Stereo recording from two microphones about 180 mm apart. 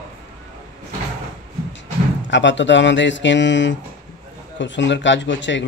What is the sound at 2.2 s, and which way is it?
Speech, 90° left.